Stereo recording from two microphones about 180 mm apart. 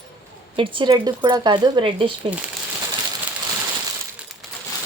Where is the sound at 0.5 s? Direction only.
30° right (ahead or behind).